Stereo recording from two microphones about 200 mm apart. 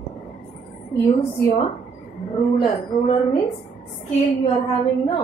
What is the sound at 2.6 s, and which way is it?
Speech, 30° left (ahead or behind).